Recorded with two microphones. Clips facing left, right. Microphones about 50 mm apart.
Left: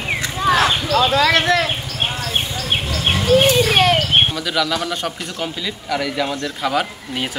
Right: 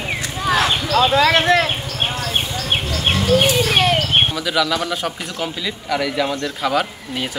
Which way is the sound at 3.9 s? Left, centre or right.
Centre.